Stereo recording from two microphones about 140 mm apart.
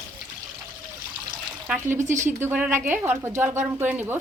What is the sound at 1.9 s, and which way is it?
Speech, 60° right (ahead or behind).